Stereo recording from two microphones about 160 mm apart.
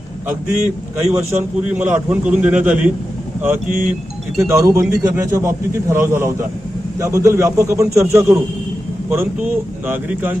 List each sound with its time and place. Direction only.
1.4 s a man's voice: 10° right (ahead or behind)